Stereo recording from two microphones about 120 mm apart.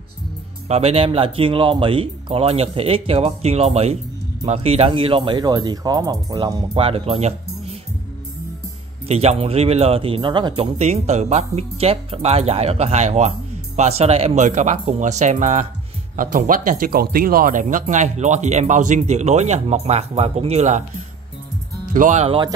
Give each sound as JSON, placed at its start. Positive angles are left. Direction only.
{"t": 0.7, "sound": "speech", "side_deg": -60}
{"t": 9.0, "sound": "speech", "side_deg": -60}
{"t": 10.6, "sound": "speech", "side_deg": -65}
{"t": 21.9, "sound": "speech", "side_deg": -80}